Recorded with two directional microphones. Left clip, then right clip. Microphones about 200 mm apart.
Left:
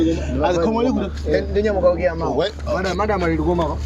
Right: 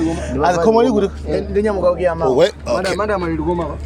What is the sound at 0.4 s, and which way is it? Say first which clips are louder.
Speech: right 6 dB; 40° right (ahead or behind).